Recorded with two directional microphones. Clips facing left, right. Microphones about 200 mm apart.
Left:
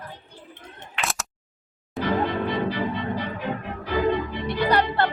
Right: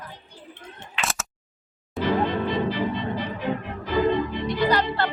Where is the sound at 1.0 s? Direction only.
Centre (ahead or behind).